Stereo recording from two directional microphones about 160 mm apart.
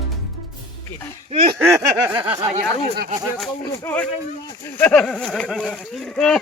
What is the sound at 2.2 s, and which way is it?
Speech, 20° right (ahead or behind).